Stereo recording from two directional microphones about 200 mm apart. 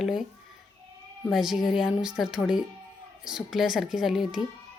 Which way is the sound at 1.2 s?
Centre (ahead or behind).